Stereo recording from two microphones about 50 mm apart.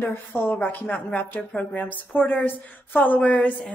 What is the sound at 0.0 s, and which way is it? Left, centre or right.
A woman's voice, left.